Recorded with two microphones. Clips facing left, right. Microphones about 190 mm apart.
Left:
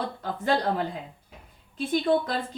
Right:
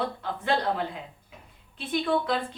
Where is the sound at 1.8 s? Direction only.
40° left (ahead or behind).